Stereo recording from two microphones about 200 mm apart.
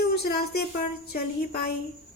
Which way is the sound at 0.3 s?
55° left (ahead or behind).